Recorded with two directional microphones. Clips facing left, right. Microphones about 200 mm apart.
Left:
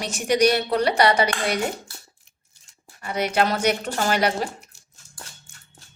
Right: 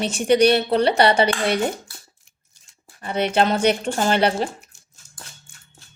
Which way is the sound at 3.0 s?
30° right (ahead or behind).